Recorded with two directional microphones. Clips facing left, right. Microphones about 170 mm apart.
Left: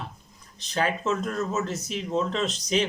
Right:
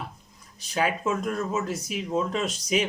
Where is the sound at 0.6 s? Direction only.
10° right (ahead or behind).